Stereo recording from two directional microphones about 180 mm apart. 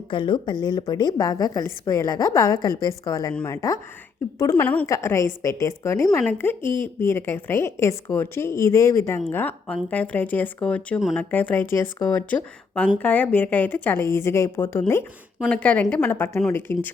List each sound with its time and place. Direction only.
0.1 s a woman's voice: 25° left (ahead or behind)